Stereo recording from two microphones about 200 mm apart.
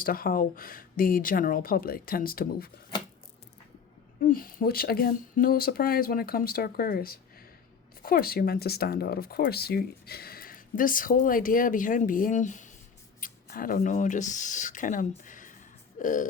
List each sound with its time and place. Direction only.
0.0 s speech: 45° left (ahead or behind)
4.2 s speech: 45° left (ahead or behind)
16.0 s a sound: 40° left (ahead or behind)